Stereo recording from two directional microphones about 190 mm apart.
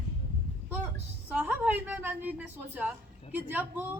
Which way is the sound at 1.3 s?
10° right (ahead or behind).